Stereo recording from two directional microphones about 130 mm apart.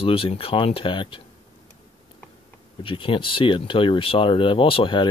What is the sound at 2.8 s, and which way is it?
Speech, 40° left (ahead or behind).